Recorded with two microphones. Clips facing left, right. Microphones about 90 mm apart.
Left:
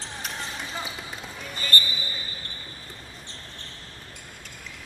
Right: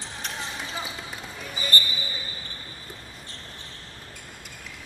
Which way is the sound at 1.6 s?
20° right (ahead or behind).